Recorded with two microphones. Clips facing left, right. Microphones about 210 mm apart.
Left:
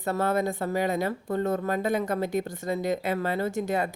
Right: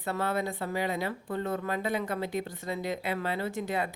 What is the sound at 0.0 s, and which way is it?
Speech, 45° left (ahead or behind).